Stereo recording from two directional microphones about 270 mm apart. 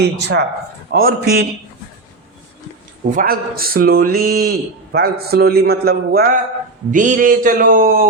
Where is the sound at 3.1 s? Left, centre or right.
Right.